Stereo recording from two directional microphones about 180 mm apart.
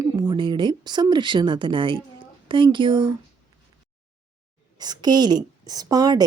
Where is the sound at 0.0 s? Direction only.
20° right (ahead or behind).